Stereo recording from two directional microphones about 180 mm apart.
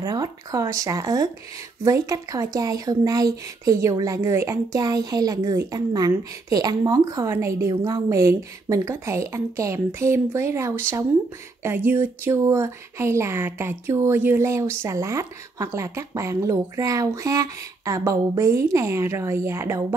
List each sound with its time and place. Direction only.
0.0 s speech: 20° right (ahead or behind)